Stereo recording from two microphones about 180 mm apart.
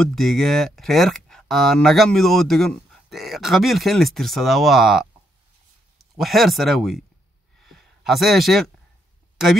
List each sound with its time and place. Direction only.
0.0 s speech: centre (ahead or behind)
6.1 s speech: centre (ahead or behind)
7.6 s a sound: centre (ahead or behind)